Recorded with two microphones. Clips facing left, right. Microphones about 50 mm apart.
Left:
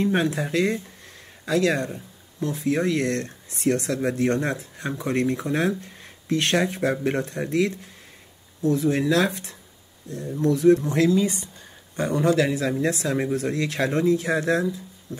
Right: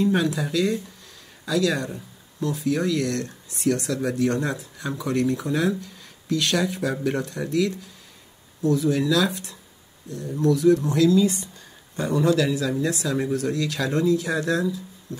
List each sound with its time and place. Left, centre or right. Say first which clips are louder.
0.0 s speech: right 1 dB; left